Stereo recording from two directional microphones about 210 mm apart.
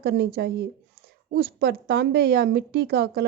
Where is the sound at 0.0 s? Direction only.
50° right (ahead or behind).